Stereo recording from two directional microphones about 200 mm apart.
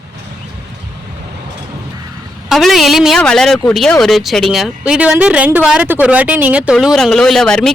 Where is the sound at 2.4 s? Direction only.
Centre (ahead or behind).